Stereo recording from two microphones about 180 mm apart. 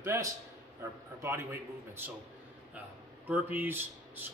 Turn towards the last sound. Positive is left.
turn(degrees=-10)  # may be behind; listen again after turning